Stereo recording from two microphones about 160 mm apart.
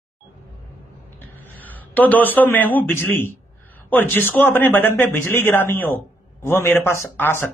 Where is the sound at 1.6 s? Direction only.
10° left (ahead or behind).